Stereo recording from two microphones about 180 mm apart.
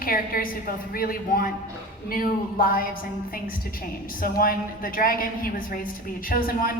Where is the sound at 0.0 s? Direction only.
55° left (ahead or behind).